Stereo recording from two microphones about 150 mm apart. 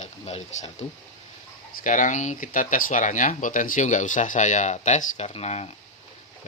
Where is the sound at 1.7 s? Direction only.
60° left (ahead or behind).